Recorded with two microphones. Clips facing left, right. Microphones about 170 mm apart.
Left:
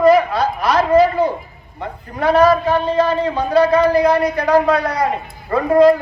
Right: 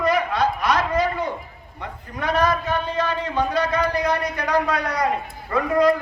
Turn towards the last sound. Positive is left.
turn(degrees=30)  # may be behind; listen again after turning